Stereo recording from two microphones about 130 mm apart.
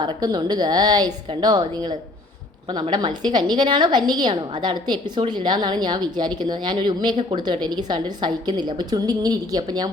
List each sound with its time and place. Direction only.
0.0 s a woman's voice: 35° right (ahead or behind)